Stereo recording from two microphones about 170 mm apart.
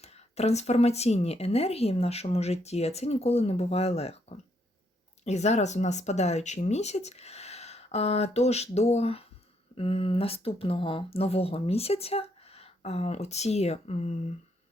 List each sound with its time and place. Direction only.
0.0 s speech: 40° left (ahead or behind)